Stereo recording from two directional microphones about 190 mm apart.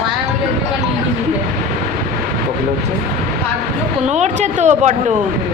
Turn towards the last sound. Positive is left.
turn(degrees=-40)  # may be behind; listen again after turning